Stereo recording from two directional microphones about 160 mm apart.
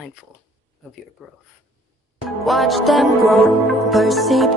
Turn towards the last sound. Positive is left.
turn(degrees=0)  # may be behind; listen again after turning